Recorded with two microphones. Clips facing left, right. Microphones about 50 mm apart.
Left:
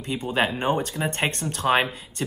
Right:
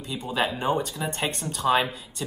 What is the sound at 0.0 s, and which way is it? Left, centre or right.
Speech, left.